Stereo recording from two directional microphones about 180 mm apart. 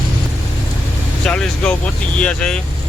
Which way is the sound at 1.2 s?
5° left (ahead or behind).